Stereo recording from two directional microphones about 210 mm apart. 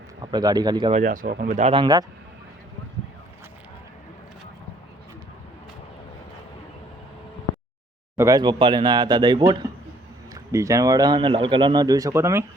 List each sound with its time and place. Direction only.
0.3 s speech: 20° right (ahead or behind)
0.9 s speech: 40° right (ahead or behind); by 2.0 s 20° right (ahead or behind)
8.1 s speech: 15° right (ahead or behind)